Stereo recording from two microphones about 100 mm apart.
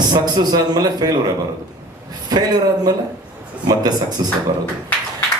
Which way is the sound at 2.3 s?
40° right (ahead or behind).